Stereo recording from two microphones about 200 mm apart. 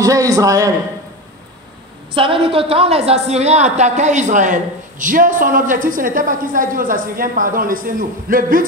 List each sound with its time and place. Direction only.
0.0 s a man's voice: 15° right (ahead or behind)
2.1 s a woman's voice: 25° right (ahead or behind); by 8.6 s 45° right (ahead or behind)